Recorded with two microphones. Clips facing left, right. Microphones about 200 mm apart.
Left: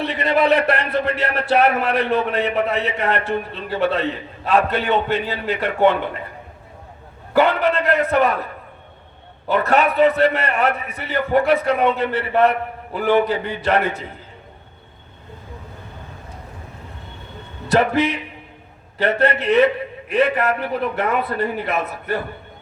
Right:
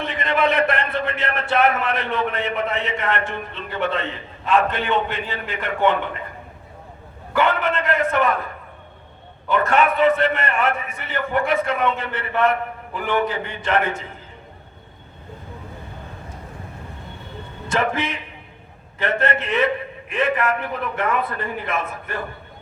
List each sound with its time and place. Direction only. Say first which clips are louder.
0.0 s a man's voice: left 3 dB; 35° left (ahead or behind)
7.3 s a man's voice: left 4 dB; 40° left (ahead or behind)
9.5 s a man's voice: left 1 dB; 35° left (ahead or behind)
17.7 s a man's voice: left 6 dB; 35° left (ahead or behind)